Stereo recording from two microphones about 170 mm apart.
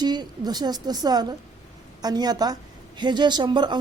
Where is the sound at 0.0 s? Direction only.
25° right (ahead or behind).